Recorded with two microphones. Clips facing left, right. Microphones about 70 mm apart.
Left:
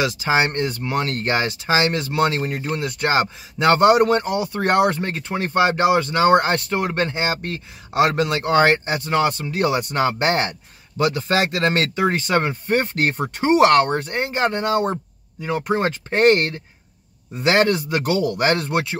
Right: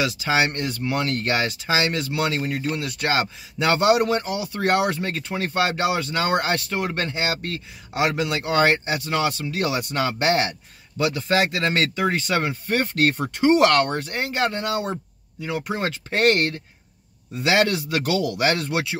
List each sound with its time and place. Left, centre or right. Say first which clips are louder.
0.0 s speech: left 2 dB; left
6.8 s speech: left 4 dB; left
7.2 s speech: left 2 dB; left
8.2 s speech: left 4 dB; left
11.0 s speech: left 2 dB; left; by 14.0 s centre
14.0 s speech: left 3 dB; left
15.7 s speech: left 6 dB; left